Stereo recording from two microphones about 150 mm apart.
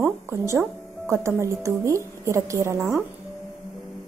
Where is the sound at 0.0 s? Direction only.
20° right (ahead or behind).